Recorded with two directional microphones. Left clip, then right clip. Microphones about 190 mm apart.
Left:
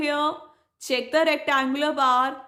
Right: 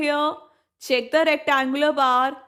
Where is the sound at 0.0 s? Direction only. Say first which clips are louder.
Right 2 dB; 30° right (ahead or behind).